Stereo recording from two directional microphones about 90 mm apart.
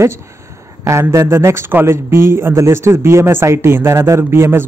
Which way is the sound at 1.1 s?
30° right (ahead or behind).